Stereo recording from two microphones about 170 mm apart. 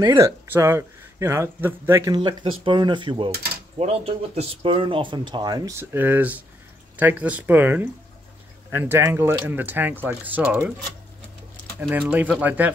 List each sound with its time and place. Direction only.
0.0 s speech: 15° right (ahead or behind)
11.8 s speech: 10° right (ahead or behind)